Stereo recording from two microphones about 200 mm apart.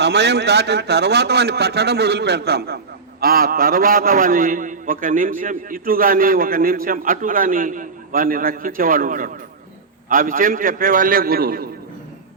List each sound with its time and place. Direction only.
0.0 s a man's voice: 55° right (ahead or behind)